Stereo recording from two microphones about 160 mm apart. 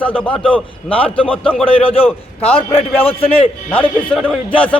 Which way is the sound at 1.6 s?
35° left (ahead or behind).